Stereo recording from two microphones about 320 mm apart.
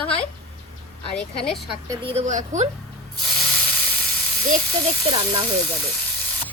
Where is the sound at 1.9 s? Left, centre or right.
Centre.